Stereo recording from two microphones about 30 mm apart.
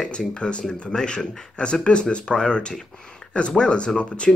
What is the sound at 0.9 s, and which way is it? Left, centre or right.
Speech, left.